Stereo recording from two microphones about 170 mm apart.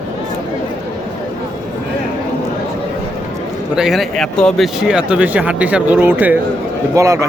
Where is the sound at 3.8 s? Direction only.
Centre (ahead or behind).